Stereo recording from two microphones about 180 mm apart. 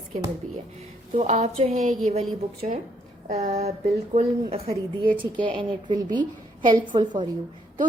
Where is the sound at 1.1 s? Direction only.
40° right (ahead or behind).